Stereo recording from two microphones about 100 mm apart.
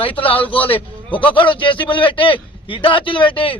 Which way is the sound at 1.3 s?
55° left (ahead or behind).